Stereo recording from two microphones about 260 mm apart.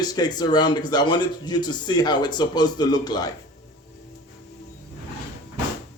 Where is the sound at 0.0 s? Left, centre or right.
Centre.